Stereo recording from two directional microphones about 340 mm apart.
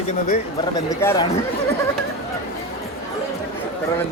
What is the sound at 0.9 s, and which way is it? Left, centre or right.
Speech, centre.